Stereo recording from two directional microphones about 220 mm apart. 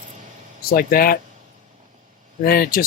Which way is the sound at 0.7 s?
40° left (ahead or behind).